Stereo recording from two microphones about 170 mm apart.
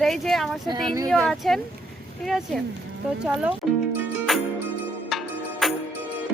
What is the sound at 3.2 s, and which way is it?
Speech, 5° right (ahead or behind).